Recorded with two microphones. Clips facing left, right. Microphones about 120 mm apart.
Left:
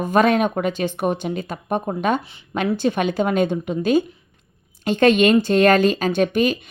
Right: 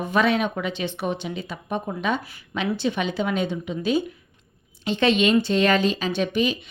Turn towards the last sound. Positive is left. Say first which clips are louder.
# left 5 dB
turn(degrees=50)  # may be behind; listen again after turning